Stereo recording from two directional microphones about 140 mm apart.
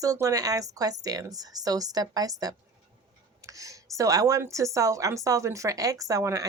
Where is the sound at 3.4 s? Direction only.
25° right (ahead or behind).